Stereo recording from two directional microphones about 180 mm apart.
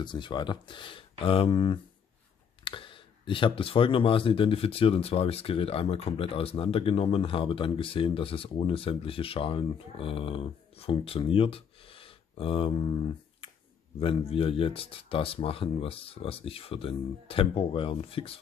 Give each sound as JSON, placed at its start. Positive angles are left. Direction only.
{"t": 0.0, "sound": "speech", "side_deg": 25}